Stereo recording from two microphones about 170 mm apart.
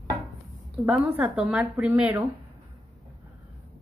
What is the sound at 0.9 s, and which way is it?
Speech, 5° right (ahead or behind).